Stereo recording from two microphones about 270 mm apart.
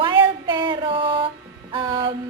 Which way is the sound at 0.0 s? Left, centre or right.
Centre.